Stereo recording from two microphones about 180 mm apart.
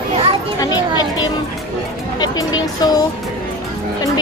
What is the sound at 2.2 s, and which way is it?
Speech, 20° left (ahead or behind).